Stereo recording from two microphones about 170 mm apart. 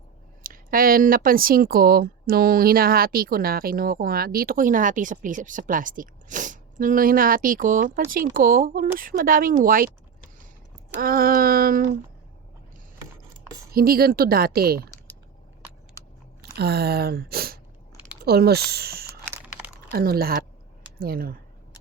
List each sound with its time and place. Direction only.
0.4 s speech: 55° right (ahead or behind)
11.0 s speech: 55° right (ahead or behind)
13.7 s speech: 60° right (ahead or behind)
16.4 s speech: 70° right (ahead or behind)
19.3 s crumpling: 10° right (ahead or behind)
19.9 s speech: 65° right (ahead or behind)